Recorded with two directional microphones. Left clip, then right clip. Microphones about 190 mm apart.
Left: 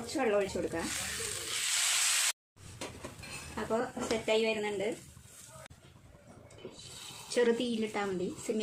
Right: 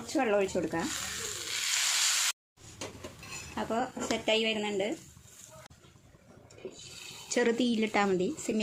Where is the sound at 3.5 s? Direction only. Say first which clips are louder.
Right 1 dB; 50° right (ahead or behind).